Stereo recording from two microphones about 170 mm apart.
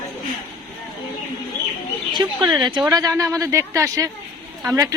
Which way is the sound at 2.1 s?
25° right (ahead or behind).